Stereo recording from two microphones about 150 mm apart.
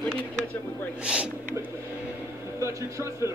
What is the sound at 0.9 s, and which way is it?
Speech, 5° right (ahead or behind).